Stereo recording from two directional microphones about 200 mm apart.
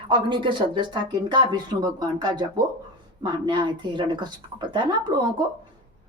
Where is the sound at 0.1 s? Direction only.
25° right (ahead or behind).